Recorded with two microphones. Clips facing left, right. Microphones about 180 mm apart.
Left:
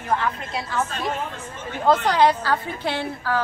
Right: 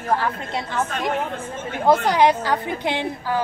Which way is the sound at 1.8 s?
15° right (ahead or behind).